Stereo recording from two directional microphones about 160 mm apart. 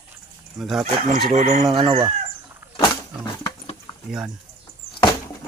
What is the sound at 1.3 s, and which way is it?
Fowl, 45° right (ahead or behind).